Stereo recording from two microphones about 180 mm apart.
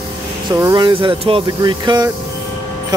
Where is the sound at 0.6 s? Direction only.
20° right (ahead or behind).